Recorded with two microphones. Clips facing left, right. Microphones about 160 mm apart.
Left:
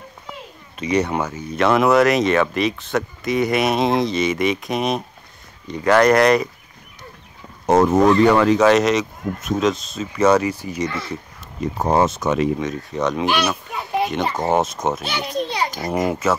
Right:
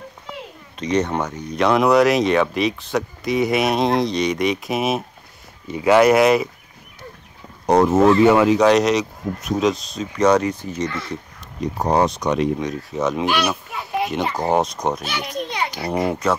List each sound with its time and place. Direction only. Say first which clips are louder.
0.7 s speech: even; 10° left (ahead or behind)
7.6 s speech: even; centre (ahead or behind)
14.3 s speech: even; centre (ahead or behind)
15.0 s a child's voice: left 3 dB; 30° left (ahead or behind)
16.1 s speech: left 1 dB; 5° left (ahead or behind)